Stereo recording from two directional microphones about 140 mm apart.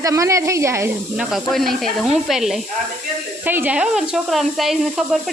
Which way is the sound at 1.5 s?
Centre (ahead or behind).